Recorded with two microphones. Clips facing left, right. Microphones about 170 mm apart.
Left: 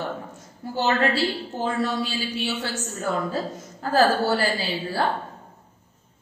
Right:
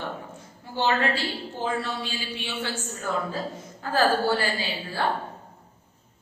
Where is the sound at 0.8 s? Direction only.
40° left (ahead or behind).